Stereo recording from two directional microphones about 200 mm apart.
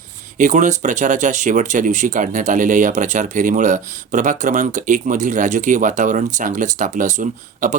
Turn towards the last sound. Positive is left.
turn(degrees=-40)  # may be behind; listen again after turning